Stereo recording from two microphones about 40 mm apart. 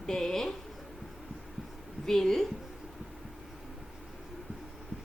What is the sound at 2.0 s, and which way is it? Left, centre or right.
Speech, centre.